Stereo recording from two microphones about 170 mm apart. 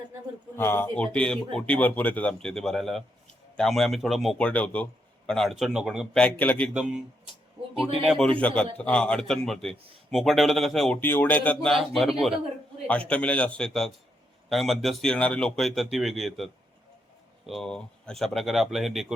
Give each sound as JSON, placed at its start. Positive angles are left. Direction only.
{"t": 0.5, "sound": "a man's voice", "side_deg": 15}
{"t": 6.2, "sound": "speech", "side_deg": 10}
{"t": 8.0, "sound": "a man's voice", "side_deg": 0}